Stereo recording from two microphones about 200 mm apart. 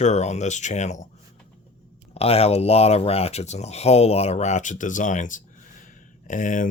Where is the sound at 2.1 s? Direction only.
30° left (ahead or behind).